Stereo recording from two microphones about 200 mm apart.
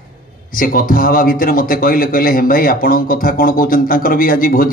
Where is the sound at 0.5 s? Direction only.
45° left (ahead or behind).